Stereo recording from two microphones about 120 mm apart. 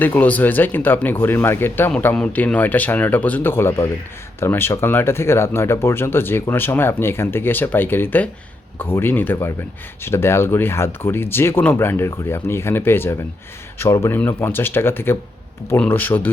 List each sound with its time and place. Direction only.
0.0 s speech: 15° left (ahead or behind)